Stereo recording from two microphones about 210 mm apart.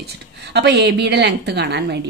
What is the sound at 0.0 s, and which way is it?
A woman's voice, 50° right (ahead or behind).